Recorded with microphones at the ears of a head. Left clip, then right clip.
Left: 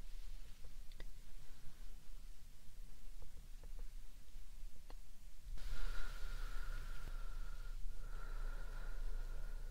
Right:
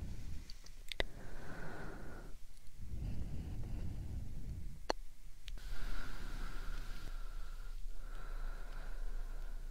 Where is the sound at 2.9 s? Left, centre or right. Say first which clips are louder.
Right 19 dB; right.